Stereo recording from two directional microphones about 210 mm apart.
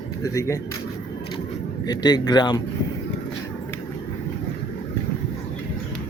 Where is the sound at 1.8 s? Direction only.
20° left (ahead or behind).